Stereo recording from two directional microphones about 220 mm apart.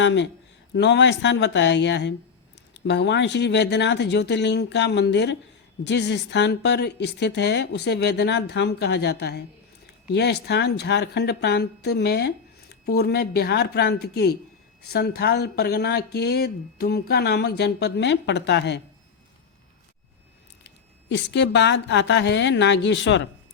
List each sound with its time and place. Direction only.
0.0 s speech: 55° left (ahead or behind)
20.7 s speech: 55° left (ahead or behind)